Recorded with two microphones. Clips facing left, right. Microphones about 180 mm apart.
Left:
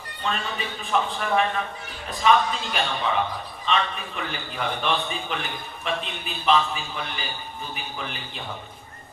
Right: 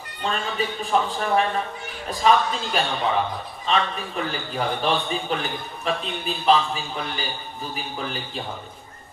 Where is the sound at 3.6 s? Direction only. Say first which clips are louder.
Right 2 dB; 35° right (ahead or behind).